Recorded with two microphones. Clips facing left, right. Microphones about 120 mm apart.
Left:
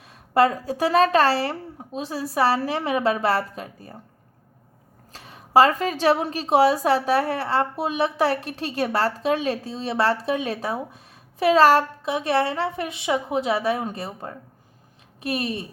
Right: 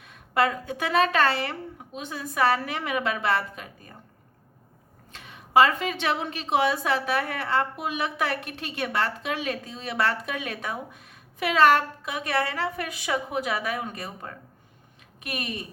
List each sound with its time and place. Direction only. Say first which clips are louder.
0.0 s a woman's voice: left 5 dB; 35° left (ahead or behind)
5.1 s a woman's voice: left 3 dB; 35° left (ahead or behind)